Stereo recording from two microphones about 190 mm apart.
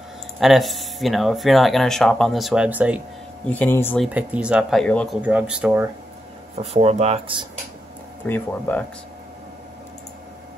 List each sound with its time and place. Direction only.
0.4 s speech: centre (ahead or behind)
3.4 s speech: 10° left (ahead or behind)
4.0 s speech: 10° right (ahead or behind)
5.2 s speech: 5° right (ahead or behind)
6.5 s speech: 35° right (ahead or behind)
8.3 s speech: 10° left (ahead or behind)